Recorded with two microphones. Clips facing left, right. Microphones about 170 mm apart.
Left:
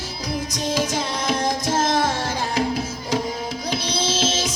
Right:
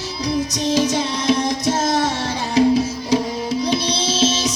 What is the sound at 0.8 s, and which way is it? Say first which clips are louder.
Music: right 4 dB; 50° left (ahead or behind).